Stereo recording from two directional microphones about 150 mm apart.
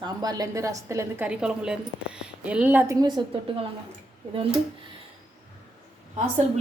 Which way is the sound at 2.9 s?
30° right (ahead or behind).